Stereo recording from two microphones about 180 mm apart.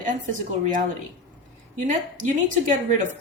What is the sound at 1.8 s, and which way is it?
A woman's voice, 45° right (ahead or behind).